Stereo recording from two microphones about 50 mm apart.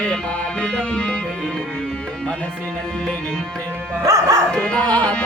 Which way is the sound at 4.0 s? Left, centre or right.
Right.